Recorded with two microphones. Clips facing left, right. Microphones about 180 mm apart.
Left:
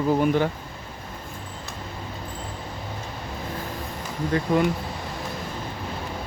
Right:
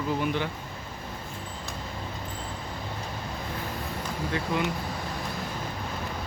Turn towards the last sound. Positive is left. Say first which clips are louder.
# left 6 dB
turn(degrees=45)  # may be behind; listen again after turning